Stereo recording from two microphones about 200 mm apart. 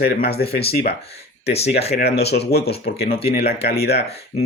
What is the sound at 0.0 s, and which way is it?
Speech, 50° left (ahead or behind).